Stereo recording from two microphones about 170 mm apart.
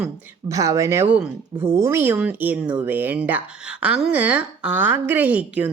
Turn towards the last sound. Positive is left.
turn(degrees=-10)  # may be behind; listen again after turning